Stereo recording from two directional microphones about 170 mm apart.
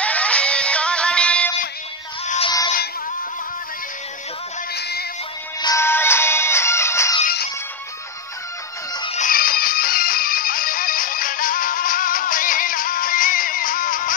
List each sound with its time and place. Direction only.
0.0 s music: 5° left (ahead or behind)
2.2 s music: 40° left (ahead or behind)
4.7 s music: 75° left (ahead or behind)
5.6 s music: 20° left (ahead or behind)
9.2 s music: 60° left (ahead or behind)